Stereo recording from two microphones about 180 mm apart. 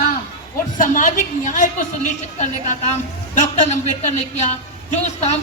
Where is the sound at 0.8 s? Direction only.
45° left (ahead or behind).